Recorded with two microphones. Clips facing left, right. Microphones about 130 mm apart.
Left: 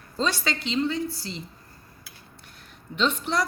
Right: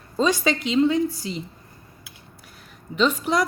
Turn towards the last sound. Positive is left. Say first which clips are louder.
# right 4 dB
turn(degrees=-5)  # may be behind; listen again after turning